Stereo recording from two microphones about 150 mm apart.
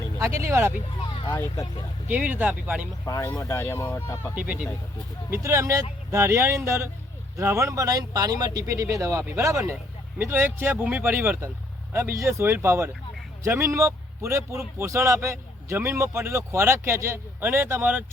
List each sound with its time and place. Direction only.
0.2 s a man's voice: 20° right (ahead or behind)
1.4 s speech: 20° left (ahead or behind)
2.0 s a man's voice: 10° right (ahead or behind)
3.0 s speech: 20° left (ahead or behind)
5.3 s a man's voice: 20° right (ahead or behind)